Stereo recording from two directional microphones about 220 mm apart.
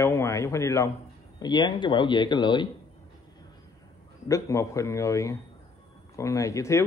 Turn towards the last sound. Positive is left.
turn(degrees=15)  # may be behind; listen again after turning